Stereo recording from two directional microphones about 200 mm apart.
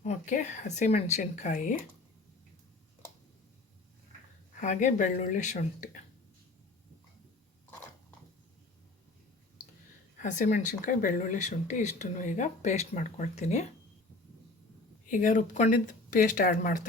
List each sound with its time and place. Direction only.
0.0 s speech: 35° left (ahead or behind)
4.6 s speech: 35° left (ahead or behind)
10.2 s speech: 40° left (ahead or behind)
15.1 s speech: 40° left (ahead or behind)